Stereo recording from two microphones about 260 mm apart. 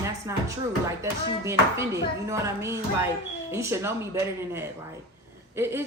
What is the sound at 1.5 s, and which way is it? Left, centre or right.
A woman's voice, centre.